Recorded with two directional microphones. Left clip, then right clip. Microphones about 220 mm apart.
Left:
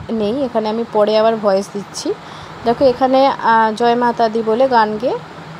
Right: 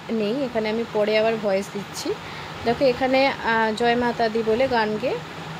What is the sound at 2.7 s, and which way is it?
Speech, 20° left (ahead or behind).